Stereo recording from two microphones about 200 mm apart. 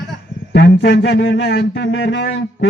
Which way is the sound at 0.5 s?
60° left (ahead or behind).